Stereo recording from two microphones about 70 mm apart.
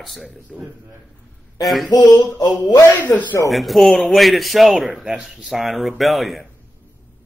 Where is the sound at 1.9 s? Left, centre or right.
Left.